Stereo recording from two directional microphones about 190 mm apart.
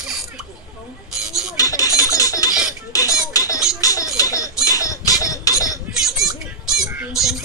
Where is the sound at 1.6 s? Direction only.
20° left (ahead or behind).